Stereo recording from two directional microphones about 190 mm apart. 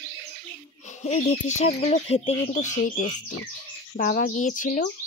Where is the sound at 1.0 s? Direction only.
35° left (ahead or behind).